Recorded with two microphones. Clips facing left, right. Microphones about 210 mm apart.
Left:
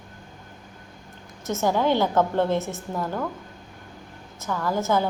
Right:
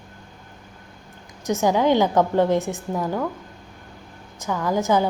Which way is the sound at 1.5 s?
15° right (ahead or behind).